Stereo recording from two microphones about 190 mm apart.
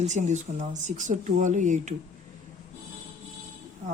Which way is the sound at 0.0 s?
40° right (ahead or behind).